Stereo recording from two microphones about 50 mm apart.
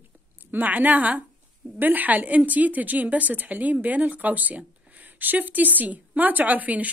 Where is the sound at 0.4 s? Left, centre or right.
Right.